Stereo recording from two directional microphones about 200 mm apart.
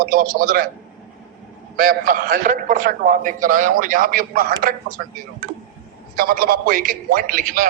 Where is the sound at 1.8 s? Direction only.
45° right (ahead or behind).